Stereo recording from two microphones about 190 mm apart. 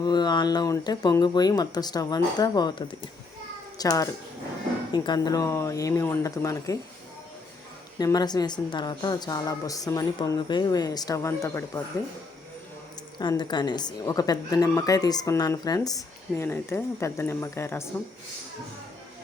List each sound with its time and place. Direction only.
0.0 s a woman's voice: 20° left (ahead or behind)
7.9 s a woman's voice: 20° left (ahead or behind)
13.1 s a woman's voice: 25° left (ahead or behind)